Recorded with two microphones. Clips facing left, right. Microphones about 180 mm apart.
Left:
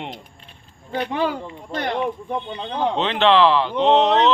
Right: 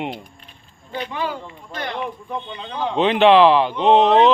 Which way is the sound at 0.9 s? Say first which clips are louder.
Left 4 dB; 55° left (ahead or behind).